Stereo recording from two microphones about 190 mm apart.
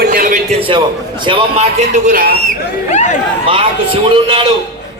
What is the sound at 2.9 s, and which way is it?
Speech, 40° left (ahead or behind).